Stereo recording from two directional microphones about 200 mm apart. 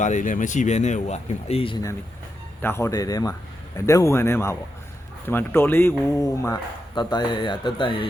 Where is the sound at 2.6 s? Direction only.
10° left (ahead or behind).